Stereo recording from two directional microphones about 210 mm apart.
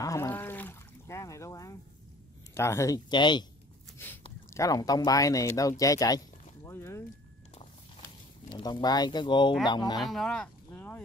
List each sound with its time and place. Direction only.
0.0 s a sound: 15° left (ahead or behind)
2.5 s speech: 15° left (ahead or behind)
4.5 s speech: 15° left (ahead or behind)
8.5 s speech: 20° left (ahead or behind)
9.9 s speech: centre (ahead or behind)